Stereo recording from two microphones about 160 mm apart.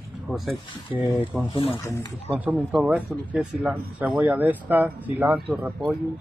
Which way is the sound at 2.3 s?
10° right (ahead or behind).